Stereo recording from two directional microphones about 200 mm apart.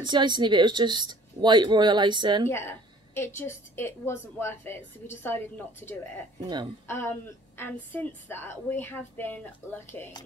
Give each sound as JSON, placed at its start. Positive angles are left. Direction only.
{"t": 0.0, "sound": "speech", "side_deg": -20}
{"t": 2.4, "sound": "a woman's voice", "side_deg": 15}